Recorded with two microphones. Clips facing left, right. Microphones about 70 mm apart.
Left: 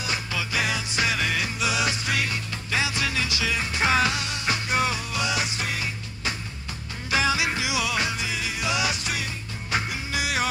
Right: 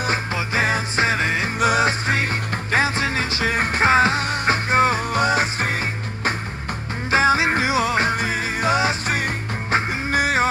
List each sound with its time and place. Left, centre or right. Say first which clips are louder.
0.0 s music: right 6 dB; right
7.1 s music: right 7 dB; right